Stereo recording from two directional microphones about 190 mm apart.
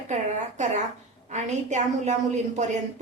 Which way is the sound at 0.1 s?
40° right (ahead or behind).